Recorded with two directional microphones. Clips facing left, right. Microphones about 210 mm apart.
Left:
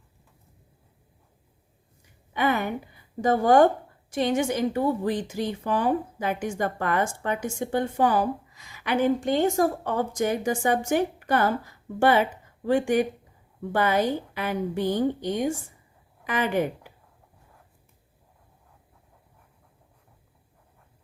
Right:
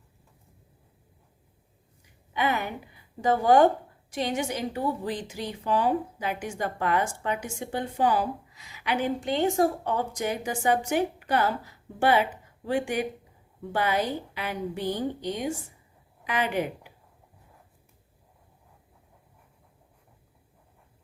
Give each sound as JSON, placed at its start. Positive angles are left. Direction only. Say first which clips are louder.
{"t": 2.3, "sound": "a woman's voice", "louder": "left 3 dB", "side_deg": 50}